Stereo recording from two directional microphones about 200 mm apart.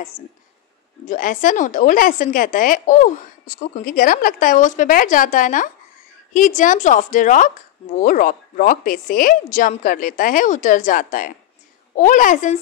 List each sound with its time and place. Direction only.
1.0 s speech: 40° left (ahead or behind)